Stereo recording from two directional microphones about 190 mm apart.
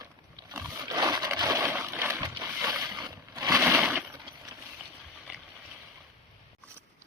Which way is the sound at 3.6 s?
5° right (ahead or behind).